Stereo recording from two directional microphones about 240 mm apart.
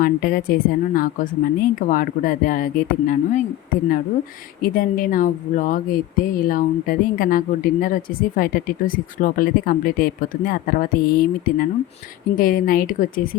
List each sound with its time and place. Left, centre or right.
0.0 s speech: left
4.6 s speech: left